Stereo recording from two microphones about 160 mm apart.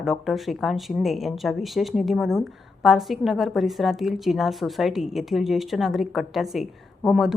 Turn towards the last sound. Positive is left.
turn(degrees=0)  # may be behind; listen again after turning